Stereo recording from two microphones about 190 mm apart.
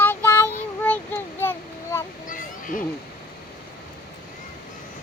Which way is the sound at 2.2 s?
45° left (ahead or behind).